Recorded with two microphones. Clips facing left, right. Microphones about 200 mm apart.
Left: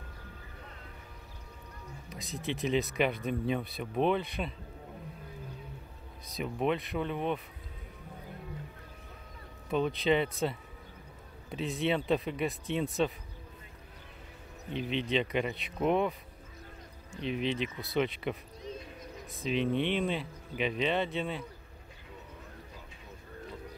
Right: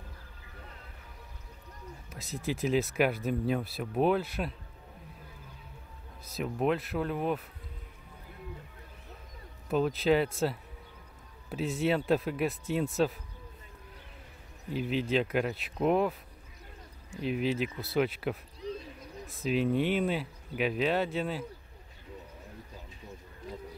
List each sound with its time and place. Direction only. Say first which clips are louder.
2.0 s speech: right 2 dB; 5° right (ahead or behind)
6.3 s speech: right 2 dB; centre (ahead or behind)
9.7 s speech: right 2 dB; 5° right (ahead or behind)
11.4 s speech: right 2 dB; 5° right (ahead or behind)
14.7 s speech: right 2 dB; 5° right (ahead or behind)
17.2 s speech: right 2 dB; 5° right (ahead or behind)
18.7 s a sound: right 3 dB; 35° right (ahead or behind)
19.4 s speech: right 2 dB; 5° right (ahead or behind)